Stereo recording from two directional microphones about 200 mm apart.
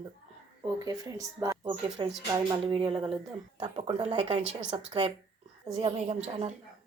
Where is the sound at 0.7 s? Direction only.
20° right (ahead or behind).